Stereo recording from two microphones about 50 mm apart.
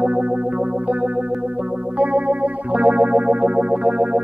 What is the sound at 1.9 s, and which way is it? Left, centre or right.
Music, right.